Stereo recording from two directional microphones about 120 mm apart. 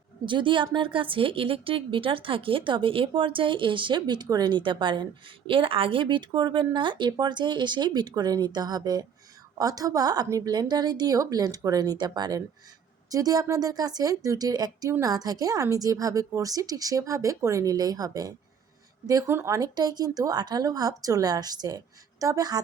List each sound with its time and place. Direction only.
0.3 s a woman's voice: 45° right (ahead or behind)